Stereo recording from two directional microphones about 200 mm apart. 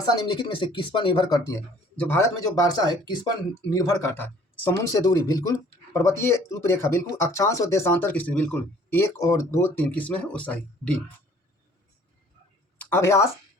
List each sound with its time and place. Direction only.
0.1 s speech: 20° left (ahead or behind)
1.5 s speech: 10° left (ahead or behind)
12.8 s speech: 10° left (ahead or behind)